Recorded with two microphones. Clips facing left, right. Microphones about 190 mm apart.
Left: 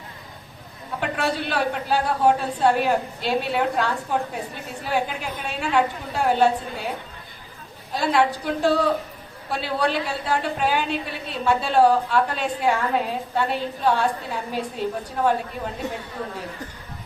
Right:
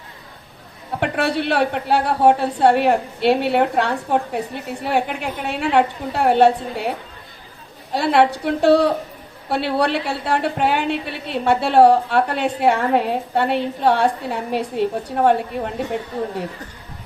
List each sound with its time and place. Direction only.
0.9 s a woman's voice: 65° right (ahead or behind)
7.9 s a woman's voice: 65° right (ahead or behind)